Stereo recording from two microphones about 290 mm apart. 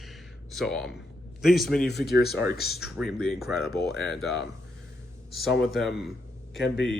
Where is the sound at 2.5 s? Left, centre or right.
Left.